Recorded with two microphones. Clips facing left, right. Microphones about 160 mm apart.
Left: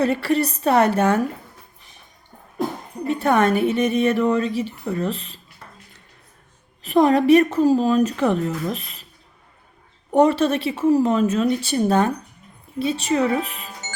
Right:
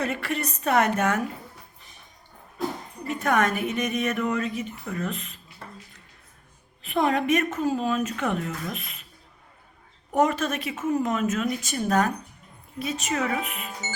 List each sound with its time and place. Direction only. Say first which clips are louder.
0.0 s a woman's voice: left 9 dB; 30° left (ahead or behind)
3.1 s a woman's voice: left 6 dB; 30° left (ahead or behind)
6.8 s a woman's voice: left 8 dB; 35° left (ahead or behind)
10.1 s a woman's voice: left 7 dB; 30° left (ahead or behind)